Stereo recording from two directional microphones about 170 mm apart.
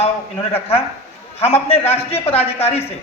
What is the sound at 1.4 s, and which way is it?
Speech, 35° left (ahead or behind).